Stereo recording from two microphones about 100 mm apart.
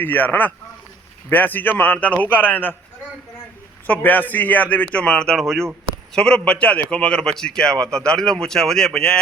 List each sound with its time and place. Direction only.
0.0 s a man's voice: 20° left (ahead or behind)
3.8 s a man's voice: 15° left (ahead or behind)